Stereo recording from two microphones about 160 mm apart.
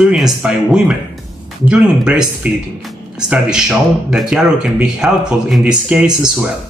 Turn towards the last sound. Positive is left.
turn(degrees=-5)  # may be behind; listen again after turning